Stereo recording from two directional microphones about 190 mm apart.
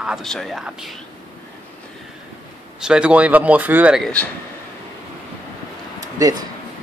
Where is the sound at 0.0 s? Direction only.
Centre (ahead or behind).